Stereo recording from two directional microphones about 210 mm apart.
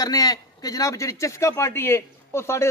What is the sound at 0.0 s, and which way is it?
A man's voice, 20° left (ahead or behind).